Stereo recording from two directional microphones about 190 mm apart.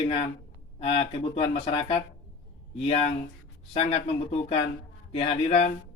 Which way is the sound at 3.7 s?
30° left (ahead or behind).